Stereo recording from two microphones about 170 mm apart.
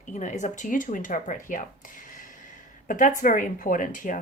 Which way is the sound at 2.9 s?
50° left (ahead or behind).